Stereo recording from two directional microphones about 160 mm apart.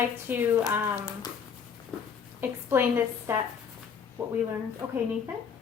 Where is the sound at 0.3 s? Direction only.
15° right (ahead or behind).